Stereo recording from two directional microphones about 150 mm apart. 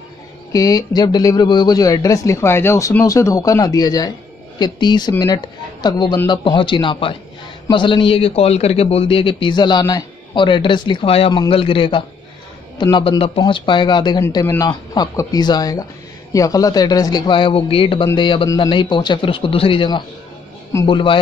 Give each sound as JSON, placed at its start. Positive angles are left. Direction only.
{"t": 0.5, "sound": "a man's voice", "side_deg": 25}
{"t": 14.3, "sound": "a man's voice", "side_deg": 20}